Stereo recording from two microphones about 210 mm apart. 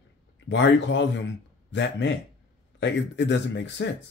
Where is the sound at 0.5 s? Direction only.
60° left (ahead or behind).